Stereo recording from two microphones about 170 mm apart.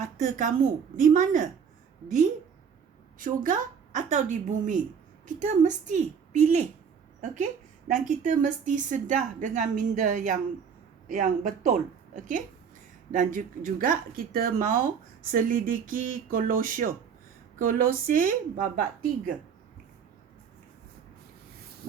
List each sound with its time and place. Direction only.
0.0 s speech: 45° right (ahead or behind)
3.4 s speech: 50° right (ahead or behind)